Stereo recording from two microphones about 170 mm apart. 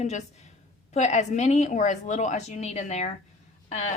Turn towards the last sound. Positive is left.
turn(degrees=40)  # may be behind; listen again after turning